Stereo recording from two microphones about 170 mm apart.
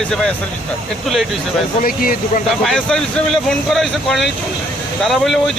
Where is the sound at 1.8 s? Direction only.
60° left (ahead or behind).